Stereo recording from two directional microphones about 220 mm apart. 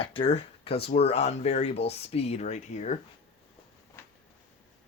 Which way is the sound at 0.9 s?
30° left (ahead or behind).